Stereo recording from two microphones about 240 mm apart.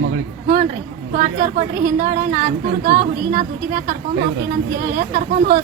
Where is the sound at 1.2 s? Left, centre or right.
Right.